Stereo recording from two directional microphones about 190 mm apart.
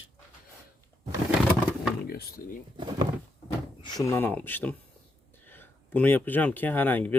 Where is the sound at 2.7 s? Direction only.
25° right (ahead or behind).